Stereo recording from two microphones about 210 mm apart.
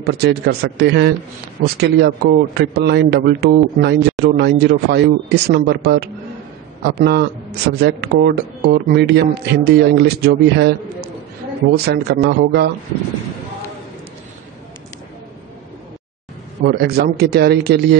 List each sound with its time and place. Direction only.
0.0 s speech: 50° right (ahead or behind)
11.7 s speech: 50° right (ahead or behind)
16.6 s speech: 50° right (ahead or behind)